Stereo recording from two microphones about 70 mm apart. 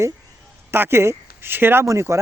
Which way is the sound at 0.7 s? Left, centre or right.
Right.